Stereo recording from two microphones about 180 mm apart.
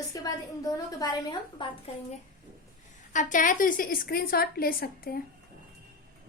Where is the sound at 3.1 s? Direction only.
45° left (ahead or behind).